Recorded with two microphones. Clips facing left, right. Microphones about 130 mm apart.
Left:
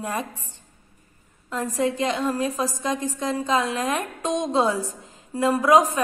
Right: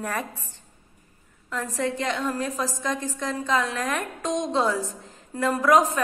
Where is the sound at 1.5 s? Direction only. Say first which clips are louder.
Left 3 dB; 15° left (ahead or behind).